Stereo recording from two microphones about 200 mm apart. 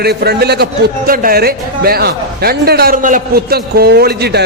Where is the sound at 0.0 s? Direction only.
55° right (ahead or behind).